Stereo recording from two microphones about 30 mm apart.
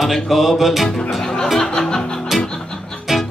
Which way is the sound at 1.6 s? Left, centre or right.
Left.